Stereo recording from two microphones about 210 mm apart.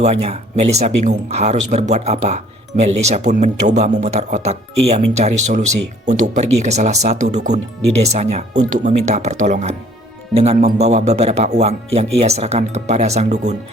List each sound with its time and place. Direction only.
0.0 s speech: 30° right (ahead or behind)